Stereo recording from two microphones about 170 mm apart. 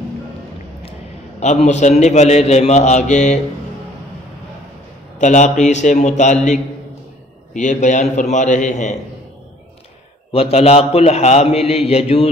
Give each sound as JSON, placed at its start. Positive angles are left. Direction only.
{"t": 1.4, "sound": "a man's voice", "side_deg": 45}
{"t": 5.2, "sound": "a man's voice", "side_deg": 45}
{"t": 10.3, "sound": "a man's voice", "side_deg": 35}